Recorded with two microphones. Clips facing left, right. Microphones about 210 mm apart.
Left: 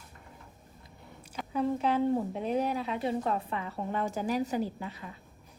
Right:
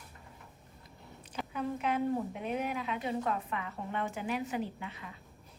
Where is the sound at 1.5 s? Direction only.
35° left (ahead or behind).